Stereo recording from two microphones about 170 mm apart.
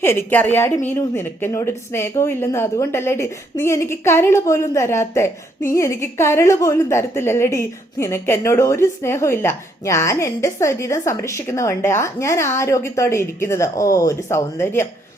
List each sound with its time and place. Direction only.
0.0 s a woman's voice: 15° left (ahead or behind)